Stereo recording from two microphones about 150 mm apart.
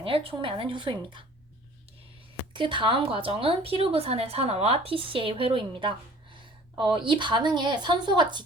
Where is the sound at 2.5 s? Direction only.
35° right (ahead or behind).